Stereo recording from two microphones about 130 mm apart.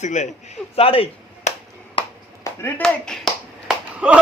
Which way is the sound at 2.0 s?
40° left (ahead or behind).